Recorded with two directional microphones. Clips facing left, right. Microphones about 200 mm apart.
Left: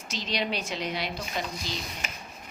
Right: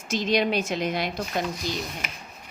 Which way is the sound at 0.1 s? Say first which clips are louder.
Right 8 dB; 50° right (ahead or behind).